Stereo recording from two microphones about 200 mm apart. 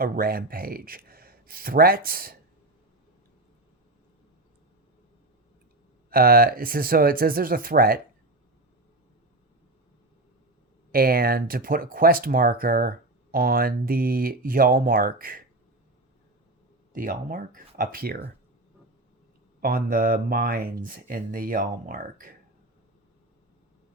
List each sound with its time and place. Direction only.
0.0 s speech: 50° right (ahead or behind)
6.1 s speech: 50° right (ahead or behind)
10.9 s speech: 50° right (ahead or behind)
16.9 s speech: 45° right (ahead or behind)
19.6 s speech: 45° right (ahead or behind)